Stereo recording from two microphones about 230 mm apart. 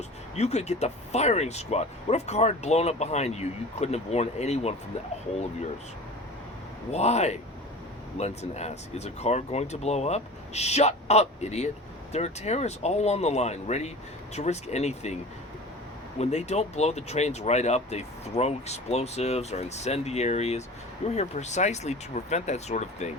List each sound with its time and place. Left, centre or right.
0.3 s speech: left
6.9 s speech: left